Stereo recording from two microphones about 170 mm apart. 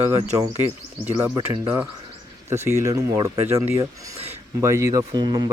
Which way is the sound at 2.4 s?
15° right (ahead or behind).